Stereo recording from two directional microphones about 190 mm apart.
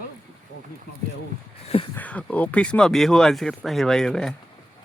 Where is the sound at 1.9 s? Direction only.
10° left (ahead or behind).